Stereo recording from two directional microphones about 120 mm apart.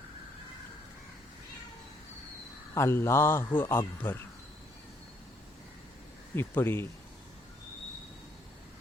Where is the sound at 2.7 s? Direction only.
20° left (ahead or behind).